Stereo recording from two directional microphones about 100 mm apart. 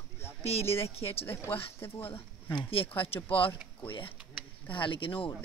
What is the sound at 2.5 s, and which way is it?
Speech, 60° left (ahead or behind).